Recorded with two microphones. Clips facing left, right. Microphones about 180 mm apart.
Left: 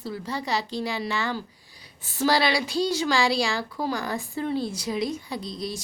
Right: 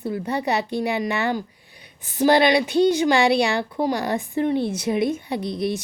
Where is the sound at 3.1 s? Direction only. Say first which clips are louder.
Right 6 dB; 65° right (ahead or behind).